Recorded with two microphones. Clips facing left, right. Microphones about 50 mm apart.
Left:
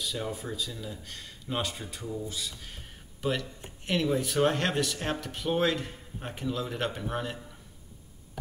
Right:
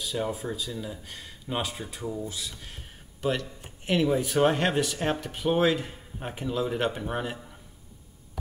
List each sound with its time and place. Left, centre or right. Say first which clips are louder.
0.0 s speech: right 4 dB; centre